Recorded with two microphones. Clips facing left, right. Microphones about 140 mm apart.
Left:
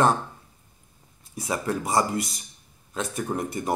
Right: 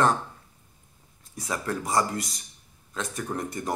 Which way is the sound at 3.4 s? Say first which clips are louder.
Left 3 dB; 10° left (ahead or behind).